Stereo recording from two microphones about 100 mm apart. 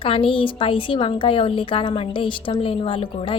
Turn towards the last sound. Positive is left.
turn(degrees=60)  # may be behind; listen again after turning